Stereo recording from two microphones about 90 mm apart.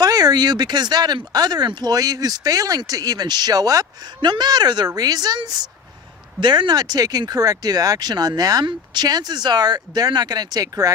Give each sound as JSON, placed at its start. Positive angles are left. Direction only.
{"t": 0.0, "sound": "speech", "side_deg": -45}
{"t": 4.2, "sound": "speech", "side_deg": -50}